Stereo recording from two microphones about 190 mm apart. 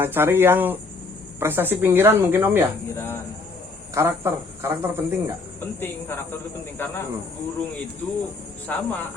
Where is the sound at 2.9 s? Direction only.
15° left (ahead or behind).